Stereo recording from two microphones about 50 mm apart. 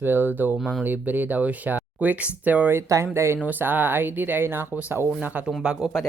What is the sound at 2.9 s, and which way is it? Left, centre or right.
Speech, right.